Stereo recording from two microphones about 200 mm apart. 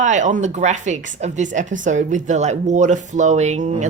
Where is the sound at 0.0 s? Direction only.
40° right (ahead or behind).